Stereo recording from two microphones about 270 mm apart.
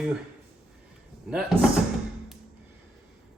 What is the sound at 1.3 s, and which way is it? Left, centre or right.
Speech, centre.